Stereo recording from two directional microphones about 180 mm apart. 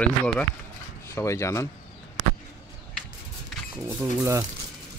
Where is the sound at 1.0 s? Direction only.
15° left (ahead or behind).